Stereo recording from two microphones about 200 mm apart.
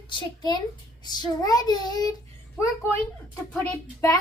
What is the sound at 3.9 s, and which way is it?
Speech, 15° left (ahead or behind).